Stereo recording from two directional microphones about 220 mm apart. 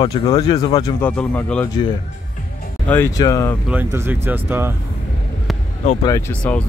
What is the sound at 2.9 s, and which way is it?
Speech, 15° left (ahead or behind).